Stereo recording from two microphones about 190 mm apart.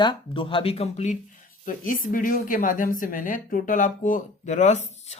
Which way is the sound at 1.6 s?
45° left (ahead or behind).